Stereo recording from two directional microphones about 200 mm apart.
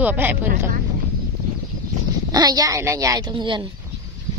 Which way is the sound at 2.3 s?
20° right (ahead or behind).